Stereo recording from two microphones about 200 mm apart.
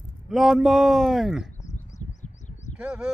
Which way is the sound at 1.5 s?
35° left (ahead or behind).